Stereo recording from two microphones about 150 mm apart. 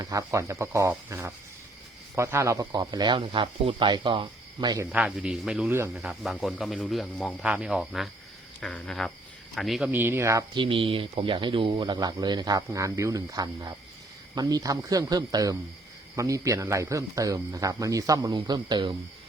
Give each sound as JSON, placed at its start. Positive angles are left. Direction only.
{"t": 0.0, "sound": "speech", "side_deg": -20}
{"t": 4.9, "sound": "speech", "side_deg": -5}
{"t": 9.9, "sound": "speech", "side_deg": -15}
{"t": 10.5, "sound": "speech", "side_deg": -35}